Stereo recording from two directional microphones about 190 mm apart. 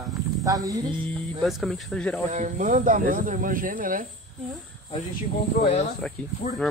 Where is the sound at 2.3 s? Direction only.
40° right (ahead or behind).